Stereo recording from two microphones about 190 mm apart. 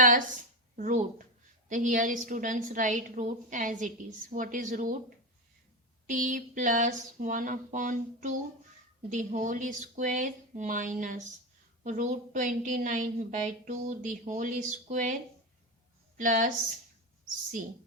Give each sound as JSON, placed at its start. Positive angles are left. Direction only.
{"t": 0.8, "sound": "a woman's voice", "side_deg": -40}